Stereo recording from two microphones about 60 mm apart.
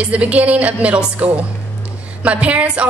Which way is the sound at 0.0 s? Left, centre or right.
Right.